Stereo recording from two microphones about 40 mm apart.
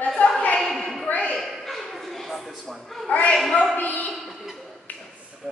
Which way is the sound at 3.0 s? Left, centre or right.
Left.